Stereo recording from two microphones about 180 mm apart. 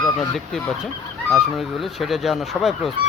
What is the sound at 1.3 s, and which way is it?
Speech, centre (ahead or behind).